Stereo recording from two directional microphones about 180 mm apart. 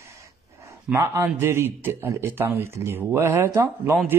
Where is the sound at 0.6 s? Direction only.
15° right (ahead or behind).